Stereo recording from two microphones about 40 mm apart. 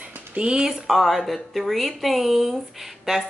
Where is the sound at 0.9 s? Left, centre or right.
Centre.